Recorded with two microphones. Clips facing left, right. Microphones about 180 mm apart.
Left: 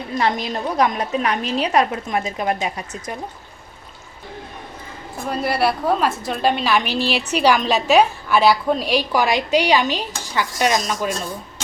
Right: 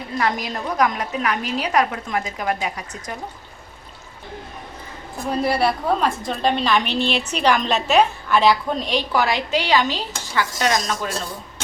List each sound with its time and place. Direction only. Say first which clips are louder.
0.2 s a woman's voice: left 2 dB; 25° left (ahead or behind)
5.4 s a woman's voice: even; centre (ahead or behind)